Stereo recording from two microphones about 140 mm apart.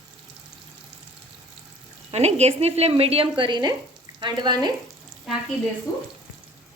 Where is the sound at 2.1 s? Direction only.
50° right (ahead or behind); by 4.7 s 30° right (ahead or behind).